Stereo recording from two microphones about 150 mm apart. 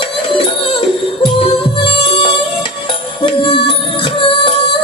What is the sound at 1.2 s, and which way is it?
Music, 35° left (ahead or behind).